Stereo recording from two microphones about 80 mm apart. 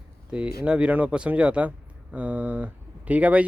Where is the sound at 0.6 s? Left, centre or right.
Centre.